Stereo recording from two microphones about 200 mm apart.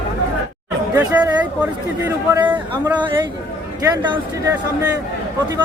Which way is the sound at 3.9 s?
20° right (ahead or behind).